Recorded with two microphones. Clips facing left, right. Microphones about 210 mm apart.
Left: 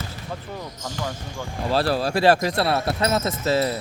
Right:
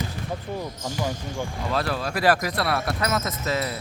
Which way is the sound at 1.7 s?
35° left (ahead or behind).